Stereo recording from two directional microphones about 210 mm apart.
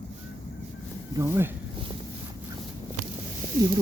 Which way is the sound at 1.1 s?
15° right (ahead or behind).